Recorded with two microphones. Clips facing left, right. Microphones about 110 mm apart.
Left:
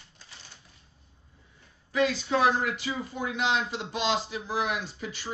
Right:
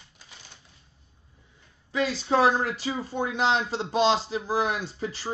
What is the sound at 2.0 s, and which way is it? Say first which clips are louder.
Speech: right 4 dB; 35° right (ahead or behind).